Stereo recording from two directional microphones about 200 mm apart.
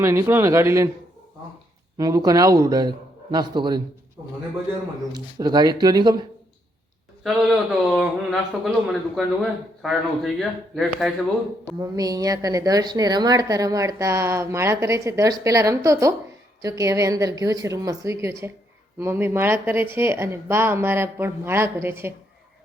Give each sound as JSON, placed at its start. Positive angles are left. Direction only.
{"t": 0.0, "sound": "a woman's voice", "side_deg": -15}
{"t": 2.0, "sound": "a woman's voice", "side_deg": -20}
{"t": 5.1, "sound": "speech", "side_deg": -20}
{"t": 7.3, "sound": "speech", "side_deg": 0}
{"t": 11.8, "sound": "a woman's voice", "side_deg": -20}